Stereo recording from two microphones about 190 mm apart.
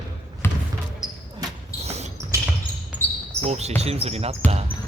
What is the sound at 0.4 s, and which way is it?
Basketball bounce, 10° left (ahead or behind).